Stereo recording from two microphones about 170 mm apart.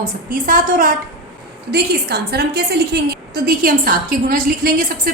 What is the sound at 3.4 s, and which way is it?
A woman's voice, 60° right (ahead or behind).